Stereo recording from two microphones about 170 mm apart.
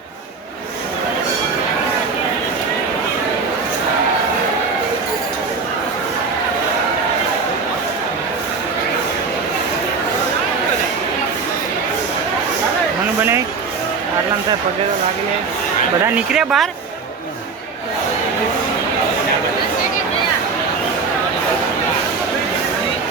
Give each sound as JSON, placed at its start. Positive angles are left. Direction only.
{"t": 16.1, "sound": "speech", "side_deg": -5}